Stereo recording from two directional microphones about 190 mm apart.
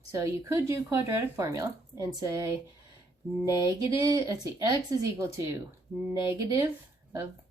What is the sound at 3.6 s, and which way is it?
A woman's voice, 15° right (ahead or behind).